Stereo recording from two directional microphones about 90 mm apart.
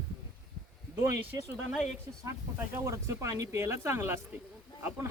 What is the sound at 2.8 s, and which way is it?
Speech, 30° right (ahead or behind).